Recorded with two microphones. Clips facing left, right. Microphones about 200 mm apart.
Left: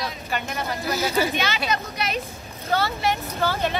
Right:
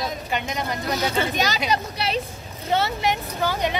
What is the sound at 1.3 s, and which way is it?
Speech, 40° right (ahead or behind).